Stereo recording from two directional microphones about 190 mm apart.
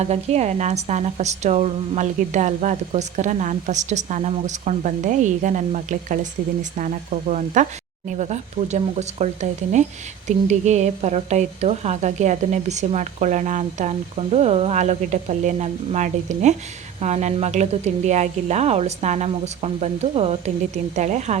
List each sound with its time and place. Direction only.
0.0 s a woman's voice: 35° right (ahead or behind)